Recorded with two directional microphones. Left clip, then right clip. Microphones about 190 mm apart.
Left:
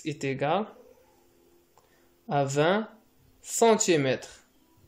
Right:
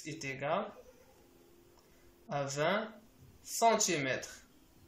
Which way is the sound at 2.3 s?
55° left (ahead or behind).